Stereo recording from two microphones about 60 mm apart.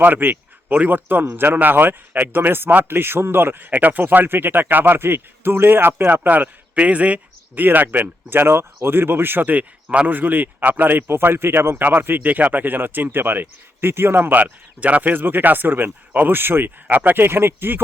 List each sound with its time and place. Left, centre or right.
0.0 s speech: right
11.8 s speech: right